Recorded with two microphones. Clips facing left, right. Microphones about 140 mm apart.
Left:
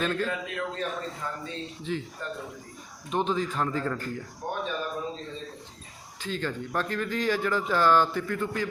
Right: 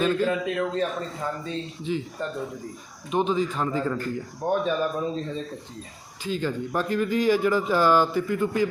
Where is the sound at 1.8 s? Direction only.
5° right (ahead or behind).